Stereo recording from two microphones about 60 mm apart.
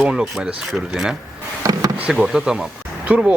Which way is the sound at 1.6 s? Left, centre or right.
Right.